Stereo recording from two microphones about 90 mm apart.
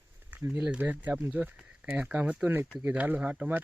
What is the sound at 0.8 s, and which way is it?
Speech, 20° right (ahead or behind).